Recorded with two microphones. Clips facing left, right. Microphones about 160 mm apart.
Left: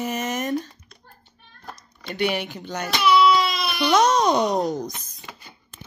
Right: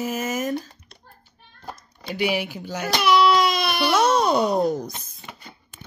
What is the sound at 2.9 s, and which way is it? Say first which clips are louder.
Baby cry: even; 45° right (ahead or behind).